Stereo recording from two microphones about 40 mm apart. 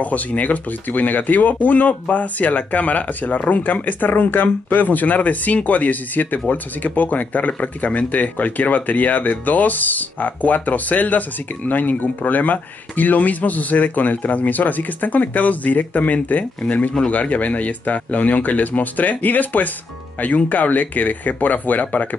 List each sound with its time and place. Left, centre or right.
0.0 s speech: left